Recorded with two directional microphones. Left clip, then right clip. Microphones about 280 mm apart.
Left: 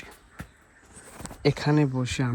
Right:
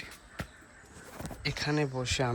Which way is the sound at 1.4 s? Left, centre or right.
Centre.